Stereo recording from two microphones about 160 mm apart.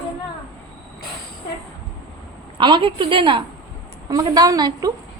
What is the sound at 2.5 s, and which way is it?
A woman's voice, 30° right (ahead or behind).